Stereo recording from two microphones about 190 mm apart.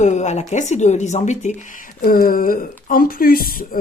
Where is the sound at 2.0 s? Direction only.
50° left (ahead or behind).